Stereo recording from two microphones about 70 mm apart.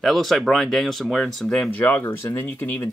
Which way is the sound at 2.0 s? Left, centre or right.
Left.